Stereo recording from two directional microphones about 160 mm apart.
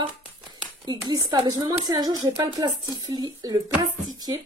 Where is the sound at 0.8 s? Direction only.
25° right (ahead or behind).